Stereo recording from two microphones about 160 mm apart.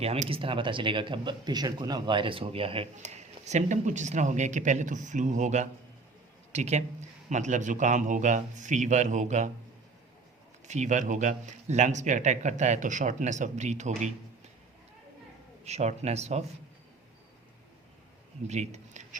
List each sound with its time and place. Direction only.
0.0 s speech: 40° right (ahead or behind)
10.7 s speech: 50° right (ahead or behind)
15.6 s speech: 45° right (ahead or behind)
18.4 s a man's voice: 45° right (ahead or behind)